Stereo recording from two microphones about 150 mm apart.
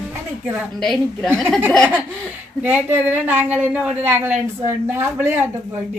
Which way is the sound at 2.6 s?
15° right (ahead or behind).